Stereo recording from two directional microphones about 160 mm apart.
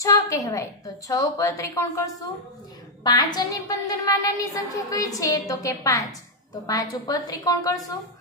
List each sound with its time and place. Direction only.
0.0 s a woman's voice: 20° left (ahead or behind)